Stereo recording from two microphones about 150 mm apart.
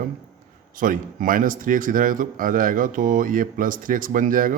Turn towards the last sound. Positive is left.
turn(degrees=-65)  # may be behind; listen again after turning